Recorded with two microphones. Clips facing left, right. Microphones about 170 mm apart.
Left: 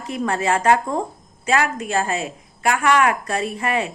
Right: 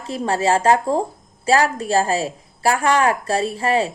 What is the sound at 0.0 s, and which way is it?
A woman's voice, 30° right (ahead or behind).